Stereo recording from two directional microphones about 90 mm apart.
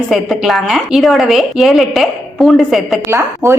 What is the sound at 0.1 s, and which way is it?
A woman's voice, centre (ahead or behind).